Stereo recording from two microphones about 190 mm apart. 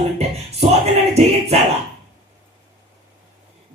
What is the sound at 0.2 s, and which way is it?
Music, 35° right (ahead or behind).